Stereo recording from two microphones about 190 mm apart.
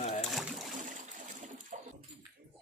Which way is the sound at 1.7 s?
35° right (ahead or behind).